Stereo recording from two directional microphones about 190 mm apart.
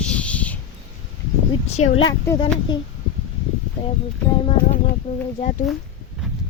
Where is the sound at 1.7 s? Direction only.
35° left (ahead or behind).